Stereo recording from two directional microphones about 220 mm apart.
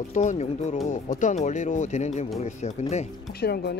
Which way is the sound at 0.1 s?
35° left (ahead or behind).